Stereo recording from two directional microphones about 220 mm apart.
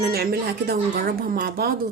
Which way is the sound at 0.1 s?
45° right (ahead or behind).